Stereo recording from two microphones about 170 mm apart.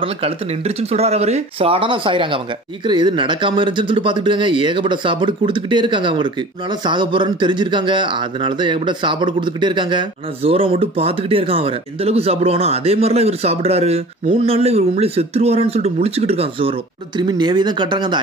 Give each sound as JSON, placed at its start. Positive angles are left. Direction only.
{"t": 0.0, "sound": "speech", "side_deg": -35}